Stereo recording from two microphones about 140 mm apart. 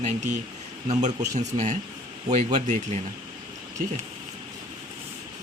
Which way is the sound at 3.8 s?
70° right (ahead or behind).